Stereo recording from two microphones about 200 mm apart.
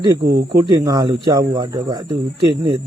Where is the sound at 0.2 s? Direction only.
55° right (ahead or behind).